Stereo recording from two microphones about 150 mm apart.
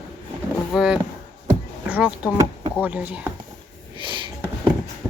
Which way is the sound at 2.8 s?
10° right (ahead or behind).